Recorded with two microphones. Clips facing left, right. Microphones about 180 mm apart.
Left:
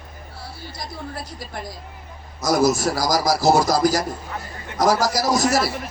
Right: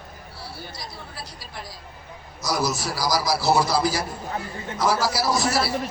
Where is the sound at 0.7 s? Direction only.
50° left (ahead or behind).